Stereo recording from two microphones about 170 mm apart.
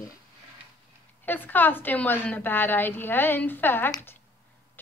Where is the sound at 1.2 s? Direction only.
10° left (ahead or behind).